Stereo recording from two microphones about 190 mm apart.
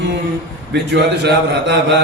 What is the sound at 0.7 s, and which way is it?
Mantra, 60° right (ahead or behind).